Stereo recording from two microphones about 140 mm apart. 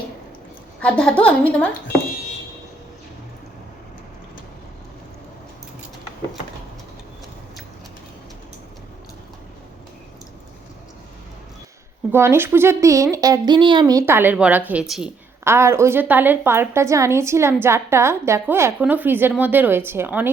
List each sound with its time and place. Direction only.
0.8 s speech: 5° left (ahead or behind)
12.1 s speech: 15° right (ahead or behind)
14.0 s a woman's voice: 15° right (ahead or behind)
15.4 s a woman's voice: 20° right (ahead or behind)